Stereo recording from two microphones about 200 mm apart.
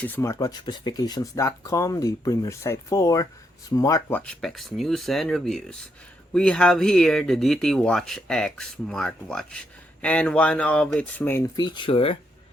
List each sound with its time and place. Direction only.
0.0 s speech: 10° left (ahead or behind)
4.2 s speech: 5° left (ahead or behind); by 12.1 s 25° left (ahead or behind)